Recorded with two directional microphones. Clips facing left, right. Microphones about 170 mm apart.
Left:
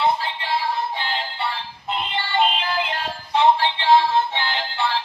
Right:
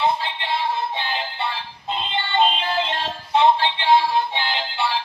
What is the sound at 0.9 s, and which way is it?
Music, 20° right (ahead or behind).